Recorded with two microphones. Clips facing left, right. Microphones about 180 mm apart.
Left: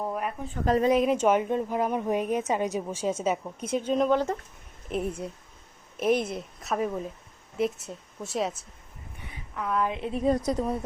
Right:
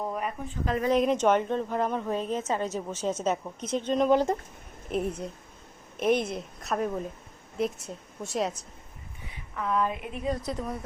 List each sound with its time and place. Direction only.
0.0 s a sound: 5° left (ahead or behind)
0.9 s a woman's voice: 5° left (ahead or behind)
9.6 s a woman's voice: 5° left (ahead or behind)
10.0 s a woman's voice: 35° left (ahead or behind)